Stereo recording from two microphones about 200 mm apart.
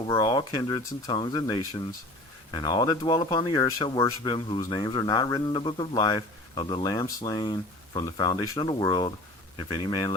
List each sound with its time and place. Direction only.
0.1 s speech: 20° left (ahead or behind)